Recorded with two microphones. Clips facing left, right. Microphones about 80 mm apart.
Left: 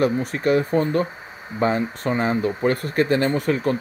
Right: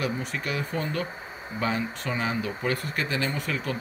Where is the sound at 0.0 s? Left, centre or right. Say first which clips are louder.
Left 10 dB; left.